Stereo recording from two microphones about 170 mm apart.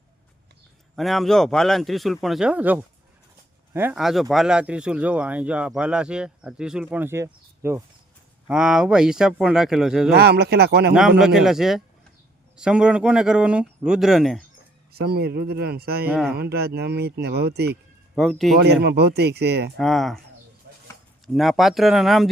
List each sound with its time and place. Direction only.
0.9 s speech: centre (ahead or behind)
3.9 s speech: centre (ahead or behind)
8.4 s speech: 5° right (ahead or behind)
10.2 s speech: 70° right (ahead or behind)
11.2 s speech: centre (ahead or behind)
14.9 s speech: 65° right (ahead or behind)
16.0 s speech: 10° right (ahead or behind)
16.3 s speech: 70° right (ahead or behind)
18.1 s speech: centre (ahead or behind)
18.6 s speech: 80° right
19.8 s speech: centre (ahead or behind)
21.3 s speech: centre (ahead or behind)